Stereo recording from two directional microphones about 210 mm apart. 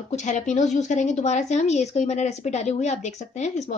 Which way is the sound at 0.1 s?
35° left (ahead or behind).